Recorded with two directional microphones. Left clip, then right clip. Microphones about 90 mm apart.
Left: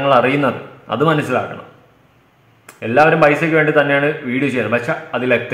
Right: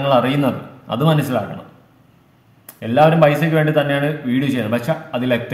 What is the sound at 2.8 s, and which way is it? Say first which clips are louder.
A man's voice: left 1 dB; 25° right (ahead or behind).